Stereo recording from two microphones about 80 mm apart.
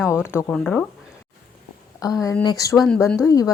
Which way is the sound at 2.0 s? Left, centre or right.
Left.